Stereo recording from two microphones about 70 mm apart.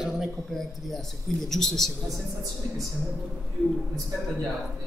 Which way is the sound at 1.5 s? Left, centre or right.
Centre.